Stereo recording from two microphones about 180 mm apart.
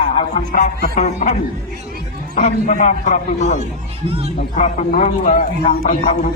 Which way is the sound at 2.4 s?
40° left (ahead or behind).